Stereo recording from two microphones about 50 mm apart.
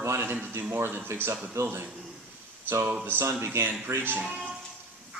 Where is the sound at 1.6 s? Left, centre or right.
Right.